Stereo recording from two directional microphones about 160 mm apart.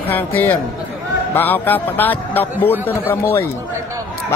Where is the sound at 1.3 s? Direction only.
10° left (ahead or behind).